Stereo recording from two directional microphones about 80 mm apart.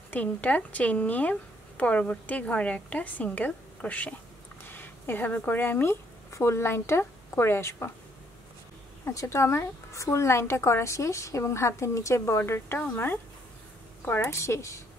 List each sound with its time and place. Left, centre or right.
0.1 s a woman's voice: centre
9.1 s a woman's voice: left
12.7 s a woman's voice: left